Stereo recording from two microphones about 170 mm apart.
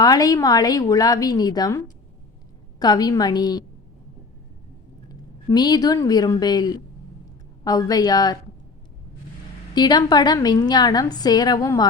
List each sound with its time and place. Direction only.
0.0 s a woman's voice: 20° left (ahead or behind)
5.5 s a woman's voice: 25° left (ahead or behind)
9.7 s a woman's voice: 25° left (ahead or behind)